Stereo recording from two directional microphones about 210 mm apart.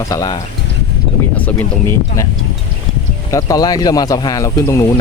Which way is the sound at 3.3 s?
15° left (ahead or behind).